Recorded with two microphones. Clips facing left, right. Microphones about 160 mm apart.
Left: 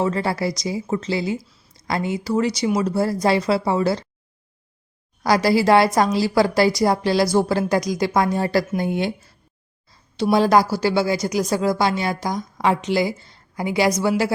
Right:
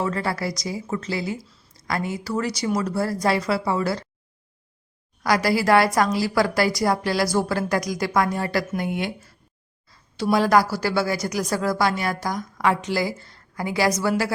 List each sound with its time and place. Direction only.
0.0 s a woman's voice: 25° left (ahead or behind)
5.2 s a woman's voice: 30° left (ahead or behind)
10.3 s a woman's voice: 25° left (ahead or behind)